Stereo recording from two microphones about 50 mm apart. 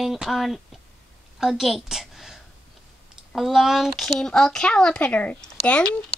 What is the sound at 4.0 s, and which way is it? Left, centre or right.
A woman's voice, centre.